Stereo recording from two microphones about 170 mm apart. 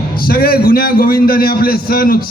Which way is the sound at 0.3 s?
65° left (ahead or behind).